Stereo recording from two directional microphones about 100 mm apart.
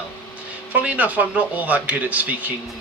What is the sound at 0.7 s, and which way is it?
Speech, 15° right (ahead or behind).